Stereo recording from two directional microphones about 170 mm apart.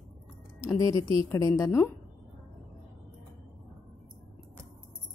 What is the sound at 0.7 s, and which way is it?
A woman's voice, 20° left (ahead or behind).